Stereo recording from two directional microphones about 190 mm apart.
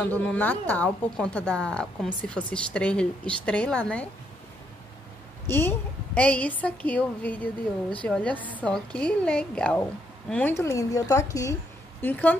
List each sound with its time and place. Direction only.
0.1 s a woman's voice: 10° left (ahead or behind)
5.5 s a woman's voice: 10° left (ahead or behind)